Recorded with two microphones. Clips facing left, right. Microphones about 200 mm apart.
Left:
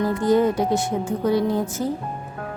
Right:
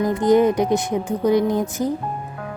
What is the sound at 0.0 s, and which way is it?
Speech, 20° right (ahead or behind).